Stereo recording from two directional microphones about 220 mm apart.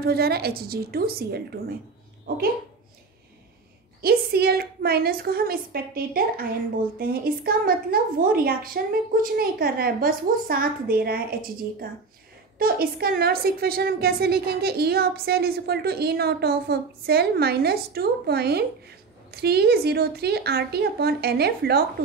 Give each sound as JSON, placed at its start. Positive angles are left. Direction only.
{"t": 0.0, "sound": "a woman's voice", "side_deg": -45}
{"t": 4.0, "sound": "a woman's voice", "side_deg": -45}
{"t": 12.5, "sound": "a woman's voice", "side_deg": -45}